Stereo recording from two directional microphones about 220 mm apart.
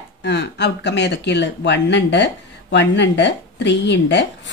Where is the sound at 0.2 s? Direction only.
50° left (ahead or behind).